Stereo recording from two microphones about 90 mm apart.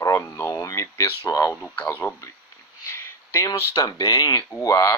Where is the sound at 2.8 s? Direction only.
30° left (ahead or behind).